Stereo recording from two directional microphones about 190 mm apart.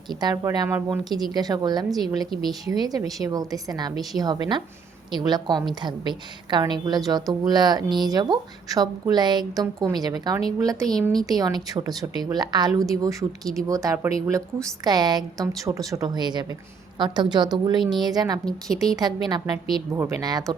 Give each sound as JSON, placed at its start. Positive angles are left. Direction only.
{"t": 0.1, "sound": "speech", "side_deg": -20}
{"t": 5.1, "sound": "speech", "side_deg": -20}
{"t": 10.8, "sound": "a woman's voice", "side_deg": 0}
{"t": 11.2, "sound": "speech", "side_deg": -20}
{"t": 13.4, "sound": "a woman's voice", "side_deg": 0}
{"t": 13.7, "sound": "a woman's voice", "side_deg": -15}
{"t": 18.4, "sound": "a woman's voice", "side_deg": 0}
{"t": 18.9, "sound": "speech", "side_deg": -20}